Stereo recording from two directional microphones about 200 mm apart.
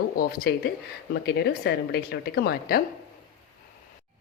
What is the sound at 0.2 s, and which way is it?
A woman's voice, 45° left (ahead or behind).